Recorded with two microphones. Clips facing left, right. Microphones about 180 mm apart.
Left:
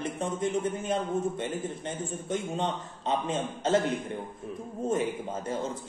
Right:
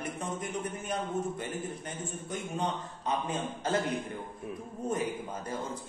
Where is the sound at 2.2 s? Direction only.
25° left (ahead or behind).